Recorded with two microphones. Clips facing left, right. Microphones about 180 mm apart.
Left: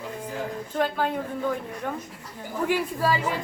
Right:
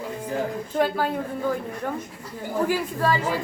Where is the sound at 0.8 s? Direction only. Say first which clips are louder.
Right 2 dB; 5° right (ahead or behind).